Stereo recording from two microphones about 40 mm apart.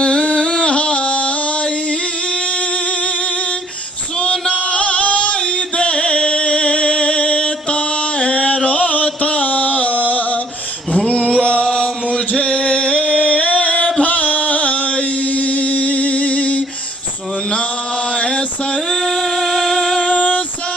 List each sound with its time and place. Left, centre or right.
0.0 s music: left
4.2 s music: left
11.0 s male singing: left
11.7 s chant: left
18.9 s music: centre
19.8 s music: centre
20.2 s female singing: left